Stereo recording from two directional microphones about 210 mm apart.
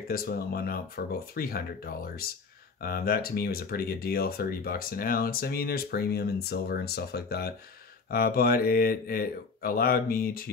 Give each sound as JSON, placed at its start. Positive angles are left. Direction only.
{"t": 0.1, "sound": "speech", "side_deg": 45}